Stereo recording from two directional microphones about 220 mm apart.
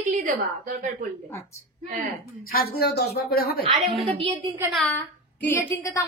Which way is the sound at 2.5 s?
45° left (ahead or behind).